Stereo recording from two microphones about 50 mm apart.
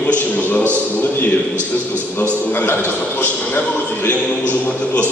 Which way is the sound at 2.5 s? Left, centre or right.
Left.